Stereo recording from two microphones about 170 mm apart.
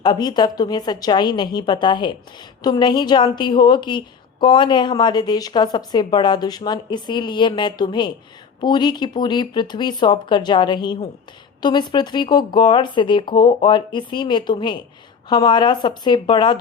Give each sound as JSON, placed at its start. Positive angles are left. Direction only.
{"t": 0.0, "sound": "a woman's voice", "side_deg": 25}